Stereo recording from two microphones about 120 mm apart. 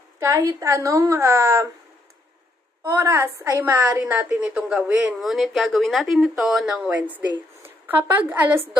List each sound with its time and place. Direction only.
0.2 s a woman's voice: 25° right (ahead or behind)
2.8 s a woman's voice: 20° right (ahead or behind)